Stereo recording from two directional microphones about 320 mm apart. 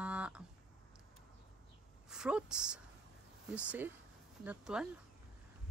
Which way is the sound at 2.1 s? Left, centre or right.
Centre.